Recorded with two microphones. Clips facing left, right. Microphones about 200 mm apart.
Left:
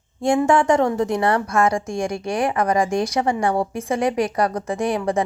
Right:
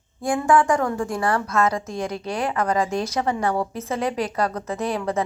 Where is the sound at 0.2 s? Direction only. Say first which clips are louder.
Left 2 dB; 25° left (ahead or behind).